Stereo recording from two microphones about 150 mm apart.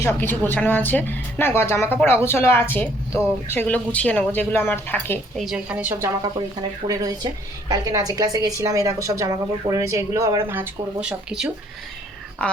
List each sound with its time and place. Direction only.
0.0 s a woman's voice: 15° left (ahead or behind)
5.4 s a woman's voice: 5° right (ahead or behind)
6.2 s a woman's voice: 25° right (ahead or behind); by 11.5 s 5° right (ahead or behind)